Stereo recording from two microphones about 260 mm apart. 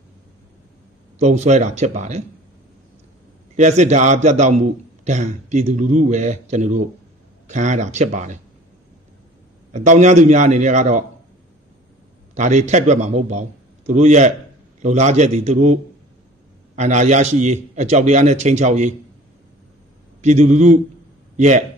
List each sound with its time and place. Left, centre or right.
1.1 s a man's voice: right
3.5 s a man's voice: right
9.7 s a man's voice: right
12.4 s a man's voice: right
20.2 s a man's voice: right